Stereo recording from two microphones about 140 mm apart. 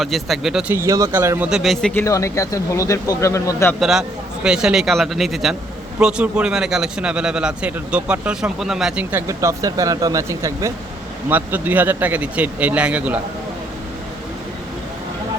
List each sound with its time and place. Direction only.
0.0 s speech: centre (ahead or behind)
0.7 s speech: 20° right (ahead or behind)
1.5 s speech: centre (ahead or behind)
1.9 s speech: 20° left (ahead or behind)
3.8 s a man's voice: centre (ahead or behind)
9.1 s a man's voice: 20° right (ahead or behind)